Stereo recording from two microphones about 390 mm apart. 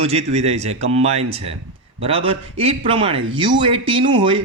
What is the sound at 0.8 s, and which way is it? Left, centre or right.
Speech, right.